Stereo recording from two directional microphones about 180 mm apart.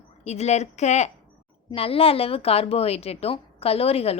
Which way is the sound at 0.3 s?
40° left (ahead or behind).